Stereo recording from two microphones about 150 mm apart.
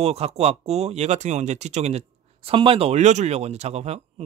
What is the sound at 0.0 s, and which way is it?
Speech, 45° right (ahead or behind).